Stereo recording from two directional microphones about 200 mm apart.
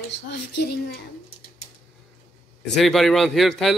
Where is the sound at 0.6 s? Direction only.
50° left (ahead or behind).